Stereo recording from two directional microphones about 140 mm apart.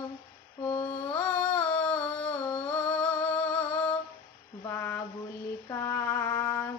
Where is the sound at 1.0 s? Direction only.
10° left (ahead or behind).